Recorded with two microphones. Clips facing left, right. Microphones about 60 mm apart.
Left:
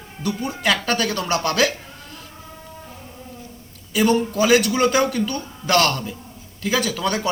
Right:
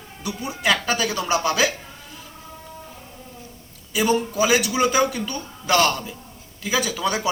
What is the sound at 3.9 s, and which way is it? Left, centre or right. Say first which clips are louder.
A man's voice: left 2 dB; centre.